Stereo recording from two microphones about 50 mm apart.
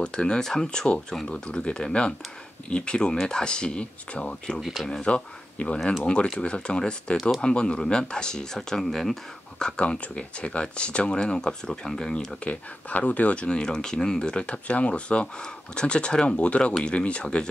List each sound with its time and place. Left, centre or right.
0.0 s speech: centre
4.6 s speech: centre
5.0 s speech: left
7.2 s speech: centre
7.4 s speech: centre
12.4 s speech: left